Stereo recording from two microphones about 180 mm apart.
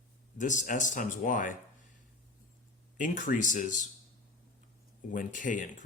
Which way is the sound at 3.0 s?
45° left (ahead or behind).